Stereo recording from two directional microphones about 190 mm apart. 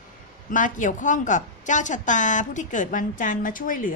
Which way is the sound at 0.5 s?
40° left (ahead or behind).